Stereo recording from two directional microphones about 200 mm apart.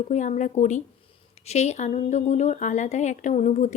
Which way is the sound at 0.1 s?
35° left (ahead or behind).